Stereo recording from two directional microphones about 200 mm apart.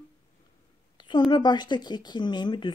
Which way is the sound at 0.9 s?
20° left (ahead or behind).